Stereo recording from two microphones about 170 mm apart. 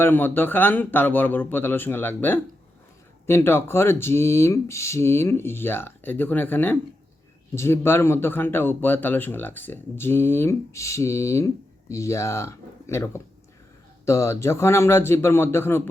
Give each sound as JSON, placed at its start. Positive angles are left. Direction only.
{"t": 0.0, "sound": "speech", "side_deg": 10}